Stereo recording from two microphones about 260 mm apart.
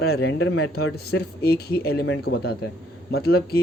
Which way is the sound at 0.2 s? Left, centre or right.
Left.